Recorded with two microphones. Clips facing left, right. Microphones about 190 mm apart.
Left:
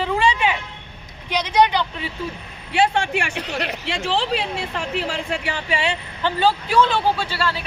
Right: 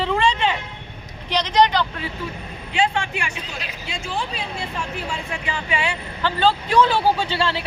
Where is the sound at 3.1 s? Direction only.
75° left (ahead or behind).